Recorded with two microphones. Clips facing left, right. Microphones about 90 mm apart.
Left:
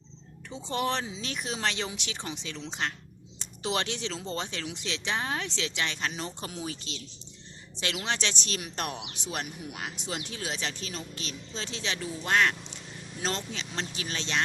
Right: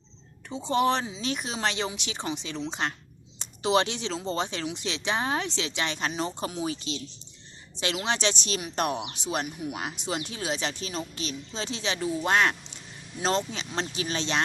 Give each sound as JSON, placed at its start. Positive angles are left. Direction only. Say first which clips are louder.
{"t": 0.7, "sound": "speech", "louder": "right 6 dB", "side_deg": -10}
{"t": 8.1, "sound": "speech", "louder": "right 4 dB", "side_deg": -15}